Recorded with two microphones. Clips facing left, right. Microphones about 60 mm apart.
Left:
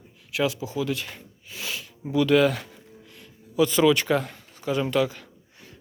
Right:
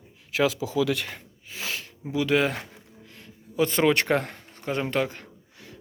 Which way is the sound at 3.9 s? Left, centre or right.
Right.